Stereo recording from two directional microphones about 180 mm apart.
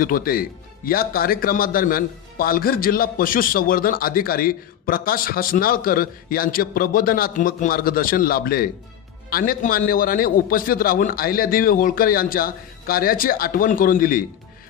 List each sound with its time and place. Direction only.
0.0 s speech: 55° left (ahead or behind)